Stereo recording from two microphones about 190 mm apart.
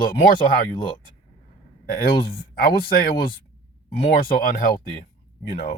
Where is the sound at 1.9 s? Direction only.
50° left (ahead or behind).